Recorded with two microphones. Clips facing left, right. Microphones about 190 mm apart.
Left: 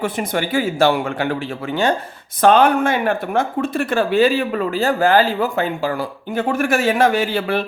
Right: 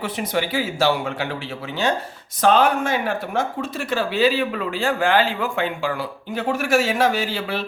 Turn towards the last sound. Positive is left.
turn(degrees=55)  # may be behind; listen again after turning